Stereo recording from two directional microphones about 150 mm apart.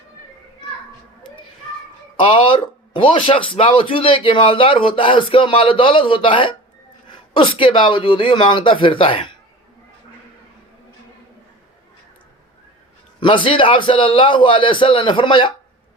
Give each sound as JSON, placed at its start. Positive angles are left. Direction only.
{"t": 2.2, "sound": "a man's voice", "side_deg": 35}
{"t": 13.1, "sound": "a man's voice", "side_deg": 35}